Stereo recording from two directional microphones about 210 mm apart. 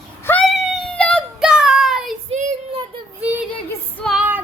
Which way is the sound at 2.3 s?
30° right (ahead or behind).